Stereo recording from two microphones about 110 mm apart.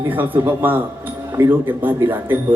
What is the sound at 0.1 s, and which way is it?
Speech, 15° right (ahead or behind).